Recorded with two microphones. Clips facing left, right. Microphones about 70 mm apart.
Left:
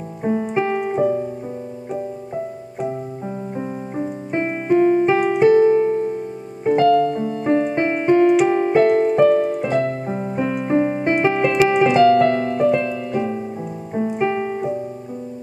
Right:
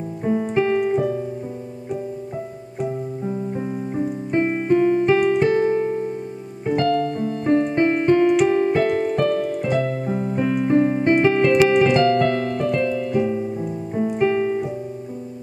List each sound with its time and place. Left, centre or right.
0.2 s keyboard: centre
2.8 s keyboard: centre
5.5 s music: centre
6.6 s keyboard: centre
8.5 s music: centre
11.8 s piano: centre